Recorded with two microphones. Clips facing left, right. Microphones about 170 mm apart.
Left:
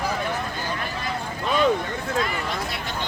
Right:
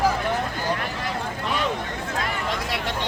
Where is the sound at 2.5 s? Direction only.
80° right.